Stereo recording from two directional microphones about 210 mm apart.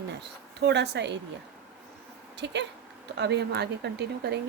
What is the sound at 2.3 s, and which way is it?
Speech, 55° right (ahead or behind).